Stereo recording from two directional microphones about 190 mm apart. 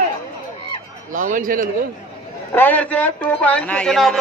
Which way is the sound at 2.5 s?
10° left (ahead or behind).